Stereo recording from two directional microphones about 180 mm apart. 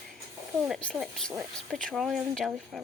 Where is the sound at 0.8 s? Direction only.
5° left (ahead or behind).